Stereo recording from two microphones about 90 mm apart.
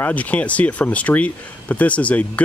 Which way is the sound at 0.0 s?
15° left (ahead or behind).